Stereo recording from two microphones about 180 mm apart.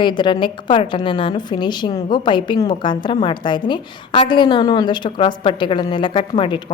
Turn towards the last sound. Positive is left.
turn(degrees=25)  # may be behind; listen again after turning